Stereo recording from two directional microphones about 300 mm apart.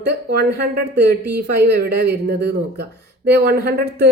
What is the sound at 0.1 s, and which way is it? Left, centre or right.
Speech, right.